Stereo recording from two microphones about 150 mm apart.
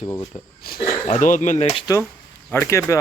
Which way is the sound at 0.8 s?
45° left (ahead or behind).